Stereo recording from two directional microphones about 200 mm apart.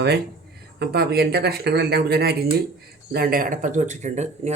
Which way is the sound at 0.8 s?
50° right (ahead or behind).